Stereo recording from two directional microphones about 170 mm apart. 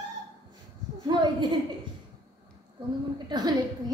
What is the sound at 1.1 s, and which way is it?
Speech, 25° right (ahead or behind).